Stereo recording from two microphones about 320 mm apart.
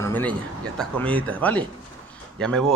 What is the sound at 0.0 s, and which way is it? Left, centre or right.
Speech, centre.